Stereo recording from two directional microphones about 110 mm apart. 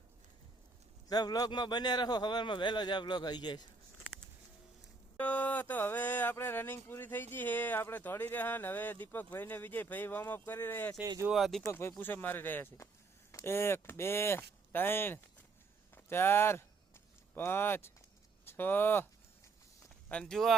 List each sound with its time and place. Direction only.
1.0 s a man's voice: 40° left (ahead or behind)
5.1 s speech: 15° left (ahead or behind)
11.3 s speech: centre (ahead or behind)
11.7 s speech: 25° left (ahead or behind)
20.1 s speech: 10° left (ahead or behind)